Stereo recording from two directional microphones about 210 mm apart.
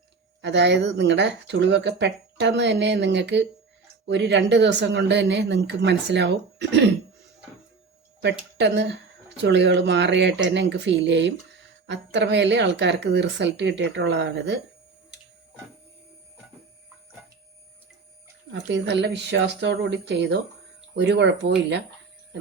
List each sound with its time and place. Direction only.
0.4 s speech: 55° right (ahead or behind)
8.5 s speech: 55° right (ahead or behind)
18.5 s speech: 60° right (ahead or behind)